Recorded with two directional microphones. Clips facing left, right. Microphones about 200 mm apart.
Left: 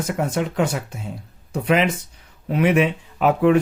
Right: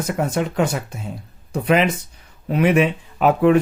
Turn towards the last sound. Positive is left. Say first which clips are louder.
# right 1 dB
turn(degrees=-45)  # may be behind; listen again after turning